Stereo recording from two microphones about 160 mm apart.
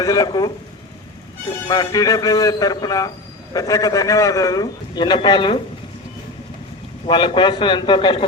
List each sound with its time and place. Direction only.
0.0 s a man's voice: 20° left (ahead or behind)
1.6 s a man's voice: 25° left (ahead or behind)
7.1 s a man's voice: 30° left (ahead or behind)